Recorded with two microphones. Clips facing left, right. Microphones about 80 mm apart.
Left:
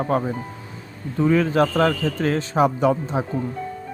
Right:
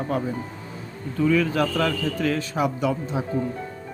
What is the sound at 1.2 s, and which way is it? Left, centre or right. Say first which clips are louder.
Speech: left 3 dB; left.